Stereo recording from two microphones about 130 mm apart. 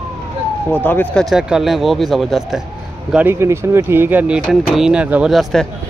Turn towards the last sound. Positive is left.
turn(degrees=0)  # may be behind; listen again after turning